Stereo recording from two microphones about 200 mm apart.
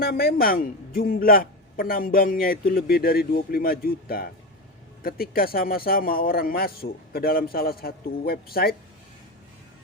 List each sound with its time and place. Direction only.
0.0 s a man's voice: 50° left (ahead or behind)